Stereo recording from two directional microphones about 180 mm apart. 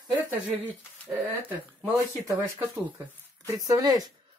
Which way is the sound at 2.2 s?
10° right (ahead or behind).